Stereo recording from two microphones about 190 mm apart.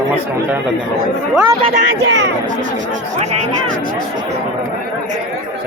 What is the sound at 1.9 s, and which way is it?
Speech, 70° right (ahead or behind).